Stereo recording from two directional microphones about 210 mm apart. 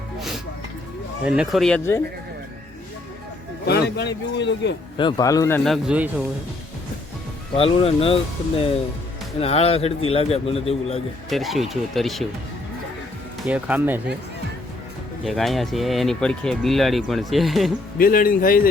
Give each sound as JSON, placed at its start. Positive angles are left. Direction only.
{"t": 1.4, "sound": "speech", "side_deg": 0}
{"t": 3.7, "sound": "a man's voice", "side_deg": 50}
{"t": 4.9, "sound": "a man's voice", "side_deg": 20}
{"t": 7.5, "sound": "speech", "side_deg": 25}
{"t": 11.3, "sound": "speech", "side_deg": 0}
{"t": 13.5, "sound": "speech", "side_deg": -10}
{"t": 15.2, "sound": "speech", "side_deg": 0}
{"t": 17.9, "sound": "a man's voice", "side_deg": 45}